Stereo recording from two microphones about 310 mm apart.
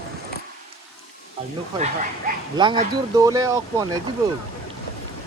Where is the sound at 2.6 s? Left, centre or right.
Centre.